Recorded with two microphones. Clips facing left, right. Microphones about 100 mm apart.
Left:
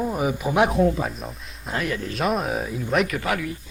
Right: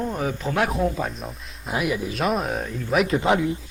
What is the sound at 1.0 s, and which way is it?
Speech, 5° left (ahead or behind).